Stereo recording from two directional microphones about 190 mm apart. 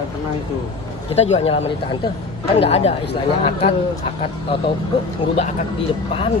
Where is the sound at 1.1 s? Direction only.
35° left (ahead or behind).